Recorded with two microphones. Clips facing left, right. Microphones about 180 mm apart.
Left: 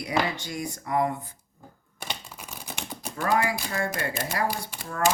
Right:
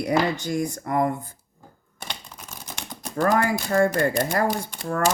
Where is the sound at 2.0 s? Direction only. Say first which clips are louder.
Left 1 dB; 5° left (ahead or behind).